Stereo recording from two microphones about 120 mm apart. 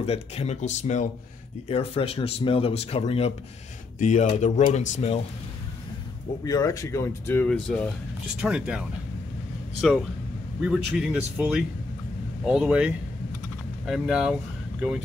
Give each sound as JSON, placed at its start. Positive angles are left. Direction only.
{"t": 0.0, "sound": "speech", "side_deg": 60}
{"t": 1.7, "sound": "speech", "side_deg": 55}
{"t": 4.0, "sound": "speech", "side_deg": 80}
{"t": 4.7, "sound": "speech", "side_deg": 65}
{"t": 6.4, "sound": "speech", "side_deg": 30}
{"t": 7.4, "sound": "speech", "side_deg": 10}
{"t": 8.4, "sound": "speech", "side_deg": -10}